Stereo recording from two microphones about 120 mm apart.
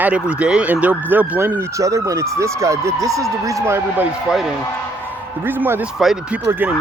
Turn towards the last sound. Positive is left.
turn(degrees=-15)  # may be behind; listen again after turning